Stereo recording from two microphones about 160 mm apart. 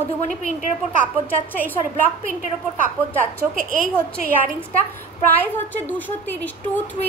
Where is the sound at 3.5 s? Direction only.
55° right (ahead or behind).